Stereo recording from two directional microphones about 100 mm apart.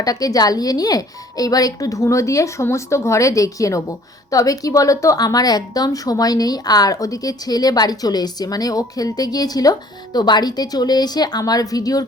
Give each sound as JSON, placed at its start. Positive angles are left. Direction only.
{"t": 0.0, "sound": "a woman's voice", "side_deg": 40}